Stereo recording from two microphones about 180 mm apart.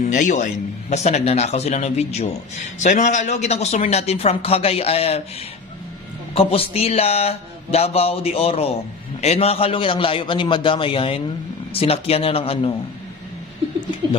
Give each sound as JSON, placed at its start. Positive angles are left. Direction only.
{"t": 0.0, "sound": "a man's voice", "side_deg": 45}
{"t": 6.3, "sound": "a man's voice", "side_deg": 30}